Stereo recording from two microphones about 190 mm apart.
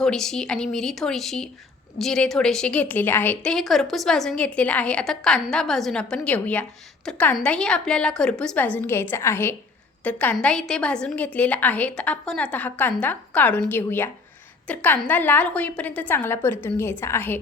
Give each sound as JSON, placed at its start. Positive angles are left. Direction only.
{"t": 0.0, "sound": "a woman's voice", "side_deg": 5}